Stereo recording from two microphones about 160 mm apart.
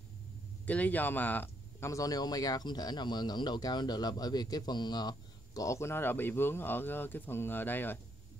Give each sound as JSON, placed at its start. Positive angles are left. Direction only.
{"t": 0.7, "sound": "speech", "side_deg": 10}